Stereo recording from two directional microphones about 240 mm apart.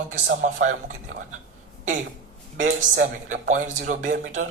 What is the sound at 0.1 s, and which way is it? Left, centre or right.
Speech, right.